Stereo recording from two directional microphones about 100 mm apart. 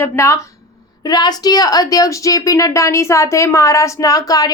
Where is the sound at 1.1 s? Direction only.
45° left (ahead or behind).